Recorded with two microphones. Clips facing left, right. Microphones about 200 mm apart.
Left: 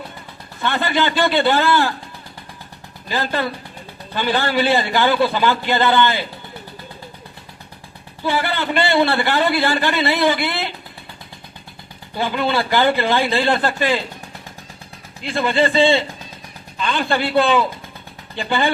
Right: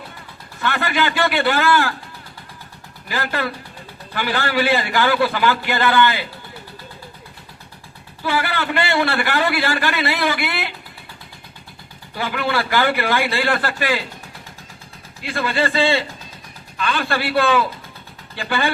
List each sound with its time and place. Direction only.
0.6 s a man's voice: 20° left (ahead or behind)
3.1 s a man's voice: 20° left (ahead or behind)
8.2 s a man's voice: 20° left (ahead or behind)
12.1 s a man's voice: 20° left (ahead or behind)
15.2 s a man's voice: 20° left (ahead or behind)